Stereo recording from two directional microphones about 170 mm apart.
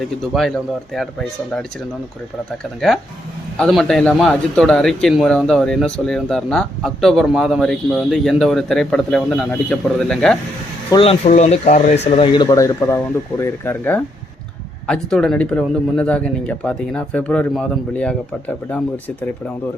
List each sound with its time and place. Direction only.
0.3 s a man's voice: centre (ahead or behind)
3.6 s a man's voice: centre (ahead or behind)
10.9 s speech: 35° left (ahead or behind)
12.0 s speech: 30° left (ahead or behind); by 19.3 s 10° left (ahead or behind)